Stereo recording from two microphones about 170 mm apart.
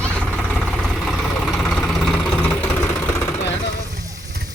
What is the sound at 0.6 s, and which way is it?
Vehicle, centre (ahead or behind).